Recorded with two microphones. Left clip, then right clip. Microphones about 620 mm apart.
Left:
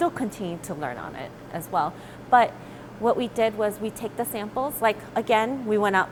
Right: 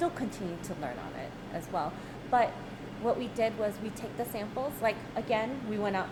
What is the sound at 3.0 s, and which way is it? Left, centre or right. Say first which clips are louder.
A woman's voice: left 7 dB; left.